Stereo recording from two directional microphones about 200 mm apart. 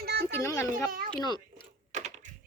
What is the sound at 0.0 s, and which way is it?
Children playing, 55° right (ahead or behind).